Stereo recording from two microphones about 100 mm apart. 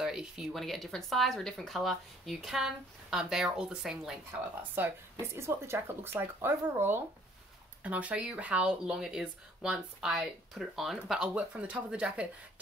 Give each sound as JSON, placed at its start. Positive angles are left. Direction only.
{"t": 0.0, "sound": "speech", "side_deg": -5}
{"t": 4.8, "sound": "speech", "side_deg": -20}